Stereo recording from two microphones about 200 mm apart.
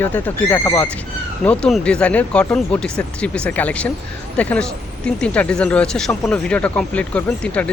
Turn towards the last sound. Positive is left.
turn(degrees=5)  # may be behind; listen again after turning